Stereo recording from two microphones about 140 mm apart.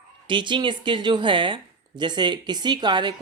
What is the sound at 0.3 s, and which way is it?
Speech, 35° right (ahead or behind).